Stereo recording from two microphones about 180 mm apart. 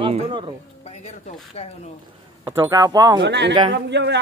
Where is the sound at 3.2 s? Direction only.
80° right.